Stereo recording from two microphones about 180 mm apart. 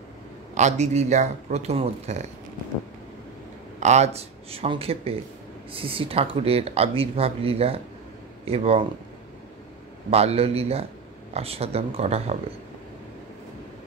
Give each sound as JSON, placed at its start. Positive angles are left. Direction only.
{"t": 0.6, "sound": "speech", "side_deg": -40}
{"t": 3.8, "sound": "speech", "side_deg": -40}
{"t": 10.1, "sound": "speech", "side_deg": -35}